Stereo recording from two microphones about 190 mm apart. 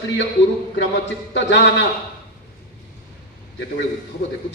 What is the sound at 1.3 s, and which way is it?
Speech, 65° left (ahead or behind).